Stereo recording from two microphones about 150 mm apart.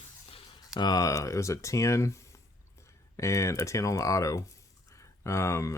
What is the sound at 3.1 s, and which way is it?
Speech, 20° left (ahead or behind).